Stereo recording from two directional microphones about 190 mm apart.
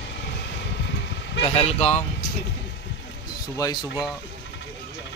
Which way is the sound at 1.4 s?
35° left (ahead or behind).